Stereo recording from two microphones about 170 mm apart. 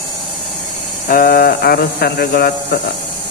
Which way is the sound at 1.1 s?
55° left (ahead or behind).